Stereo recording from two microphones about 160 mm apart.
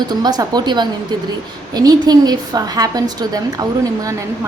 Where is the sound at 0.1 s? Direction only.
25° right (ahead or behind).